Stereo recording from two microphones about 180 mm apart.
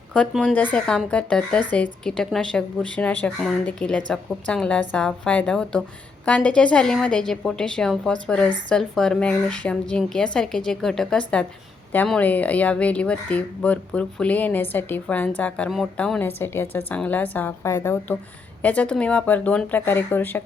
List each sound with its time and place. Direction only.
0.1 s a woman's voice: 5° left (ahead or behind)